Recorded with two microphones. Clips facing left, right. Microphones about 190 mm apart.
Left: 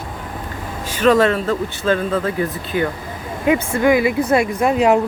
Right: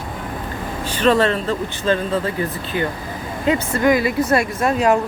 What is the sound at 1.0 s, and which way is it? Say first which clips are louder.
Speech: left 2 dB; 10° left (ahead or behind).